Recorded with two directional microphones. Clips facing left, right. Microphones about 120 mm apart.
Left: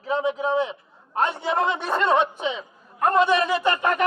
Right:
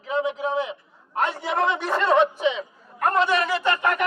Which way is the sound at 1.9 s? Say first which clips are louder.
Right 2 dB; 20° left (ahead or behind).